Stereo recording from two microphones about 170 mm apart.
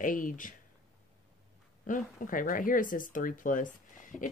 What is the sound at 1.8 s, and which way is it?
Speech, 50° left (ahead or behind).